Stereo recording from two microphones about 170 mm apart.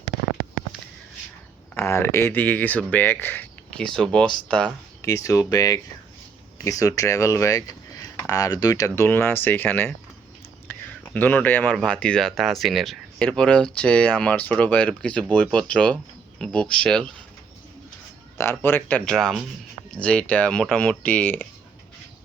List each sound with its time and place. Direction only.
1.7 s speech: 15° left (ahead or behind)
5.0 s speech: 20° left (ahead or behind)
18.3 s speech: 15° left (ahead or behind)